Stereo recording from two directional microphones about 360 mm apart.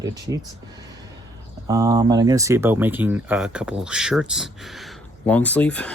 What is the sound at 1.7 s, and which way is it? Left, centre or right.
Speech, centre.